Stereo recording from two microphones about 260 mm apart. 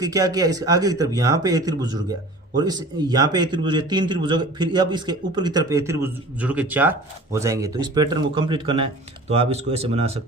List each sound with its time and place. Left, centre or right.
0.0 s a man's voice: centre